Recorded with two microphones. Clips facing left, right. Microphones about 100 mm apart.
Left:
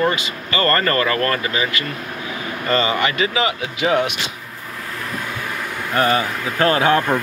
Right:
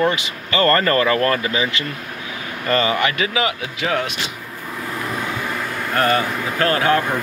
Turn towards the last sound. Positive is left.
turn(degrees=20)  # may be behind; listen again after turning